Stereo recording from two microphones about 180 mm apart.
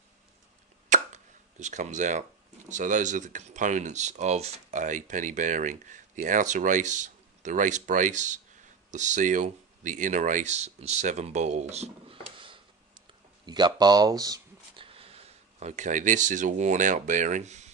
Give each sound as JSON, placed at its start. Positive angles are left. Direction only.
{"t": 0.8, "sound": "a sound", "side_deg": -40}
{"t": 2.7, "sound": "speech", "side_deg": -45}
{"t": 14.9, "sound": "speech", "side_deg": -35}